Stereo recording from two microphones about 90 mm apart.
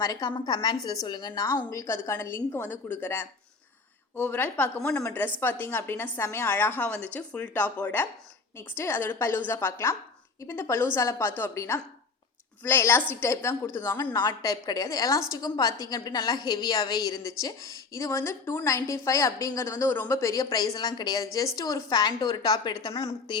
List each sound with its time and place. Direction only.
0.0 s a woman's voice: 40° left (ahead or behind)
1.7 s a woman's voice: 35° left (ahead or behind)
14.2 s a woman's voice: 45° left (ahead or behind); by 20.1 s 30° left (ahead or behind)
20.1 s a woman's voice: 40° left (ahead or behind)